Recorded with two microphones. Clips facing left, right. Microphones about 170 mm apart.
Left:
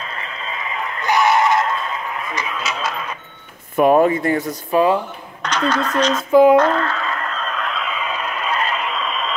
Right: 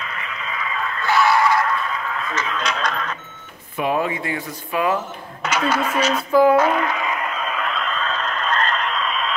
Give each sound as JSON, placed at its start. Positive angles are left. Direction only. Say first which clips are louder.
{"t": 0.0, "sound": "synthetic singing", "louder": "left 1 dB", "side_deg": 35}
{"t": 3.7, "sound": "speech", "louder": "left 8 dB", "side_deg": 50}
{"t": 5.4, "sound": "speech", "louder": "left 1 dB", "side_deg": -10}
{"t": 6.5, "sound": "radio", "louder": "left 3 dB", "side_deg": -10}